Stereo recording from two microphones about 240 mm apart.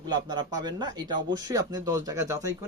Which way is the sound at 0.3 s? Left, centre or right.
Centre.